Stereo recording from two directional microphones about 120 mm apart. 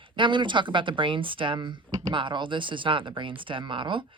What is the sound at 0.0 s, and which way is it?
Speech, 40° right (ahead or behind).